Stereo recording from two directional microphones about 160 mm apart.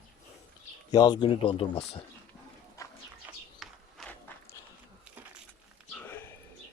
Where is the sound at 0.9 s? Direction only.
25° left (ahead or behind).